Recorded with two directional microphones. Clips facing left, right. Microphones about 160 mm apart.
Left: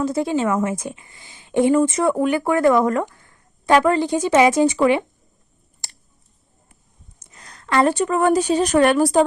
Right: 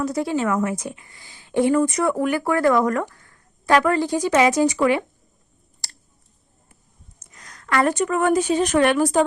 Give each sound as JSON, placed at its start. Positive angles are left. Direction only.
{"t": 0.0, "sound": "speech", "side_deg": 25}
{"t": 7.2, "sound": "speech", "side_deg": 30}